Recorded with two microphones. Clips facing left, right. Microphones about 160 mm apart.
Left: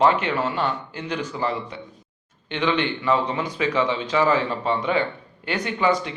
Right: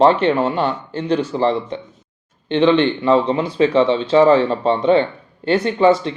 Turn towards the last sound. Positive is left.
turn(degrees=-30)  # may be behind; listen again after turning